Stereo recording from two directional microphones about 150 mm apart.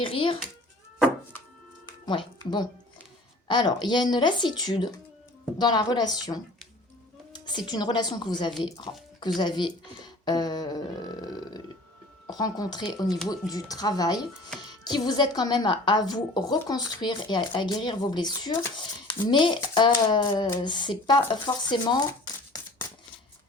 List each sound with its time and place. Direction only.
0.0 s a sound: 35° left (ahead or behind)
1.9 s music: 30° left (ahead or behind)
3.4 s a woman's voice: 30° left (ahead or behind)
7.3 s a woman's voice: 30° left (ahead or behind)